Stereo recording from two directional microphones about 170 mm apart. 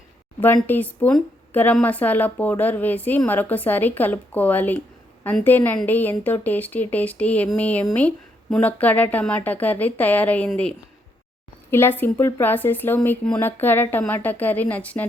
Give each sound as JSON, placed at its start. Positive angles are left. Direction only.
{"t": 0.3, "sound": "a woman's voice", "side_deg": 10}